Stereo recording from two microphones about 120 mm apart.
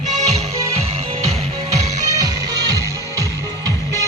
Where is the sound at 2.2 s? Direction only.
30° right (ahead or behind).